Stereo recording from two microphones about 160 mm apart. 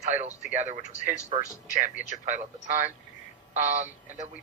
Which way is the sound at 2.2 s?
50° right (ahead or behind).